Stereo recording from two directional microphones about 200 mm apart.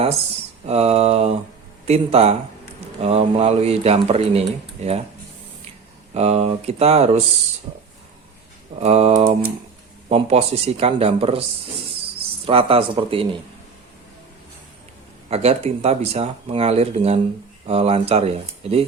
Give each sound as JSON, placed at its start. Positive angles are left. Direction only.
{"t": 0.6, "sound": "speech", "side_deg": -30}
{"t": 6.1, "sound": "speech", "side_deg": -30}
{"t": 8.8, "sound": "speech", "side_deg": -30}
{"t": 12.5, "sound": "speech", "side_deg": -30}
{"t": 15.3, "sound": "speech", "side_deg": -30}